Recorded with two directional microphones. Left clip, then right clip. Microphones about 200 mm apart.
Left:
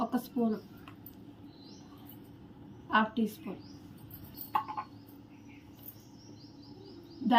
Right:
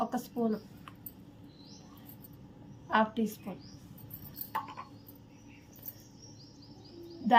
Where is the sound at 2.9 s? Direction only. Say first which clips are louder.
Even; 55° right (ahead or behind).